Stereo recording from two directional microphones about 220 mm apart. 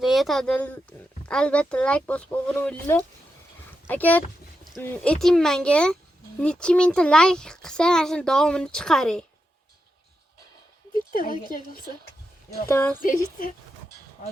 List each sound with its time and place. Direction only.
0.0 s speech: centre (ahead or behind)
4.6 s a sound: centre (ahead or behind)
4.9 s speech: 5° left (ahead or behind)
11.1 s speech: 40° left (ahead or behind)
12.6 s speech: 10° left (ahead or behind)
13.0 s speech: 40° left (ahead or behind)